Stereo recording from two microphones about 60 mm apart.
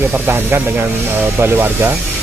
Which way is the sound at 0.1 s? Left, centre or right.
Right.